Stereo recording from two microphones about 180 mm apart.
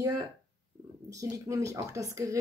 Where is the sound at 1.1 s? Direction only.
20° right (ahead or behind).